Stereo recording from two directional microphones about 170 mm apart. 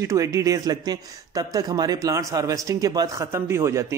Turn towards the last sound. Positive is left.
turn(degrees=-15)  # may be behind; listen again after turning